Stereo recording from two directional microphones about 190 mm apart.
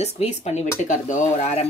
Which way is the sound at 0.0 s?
35° left (ahead or behind).